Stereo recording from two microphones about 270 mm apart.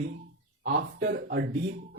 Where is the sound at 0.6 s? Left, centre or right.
Right.